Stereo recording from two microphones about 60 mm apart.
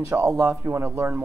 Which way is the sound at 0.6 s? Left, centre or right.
Right.